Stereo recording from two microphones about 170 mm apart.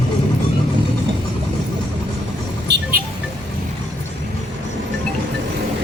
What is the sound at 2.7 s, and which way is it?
Music, 90° right.